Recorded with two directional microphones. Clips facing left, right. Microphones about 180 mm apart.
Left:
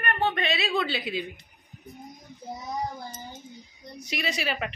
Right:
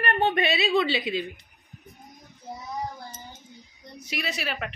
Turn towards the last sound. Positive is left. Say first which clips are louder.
# left 2 dB
turn(degrees=0)  # may be behind; listen again after turning